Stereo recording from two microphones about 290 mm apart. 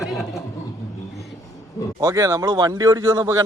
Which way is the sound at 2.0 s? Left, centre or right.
Centre.